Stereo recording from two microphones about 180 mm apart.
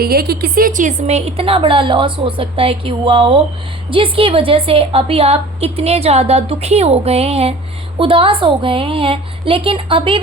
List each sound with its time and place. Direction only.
0.0 s a woman's voice: 55° right (ahead or behind); by 10.2 s 30° right (ahead or behind)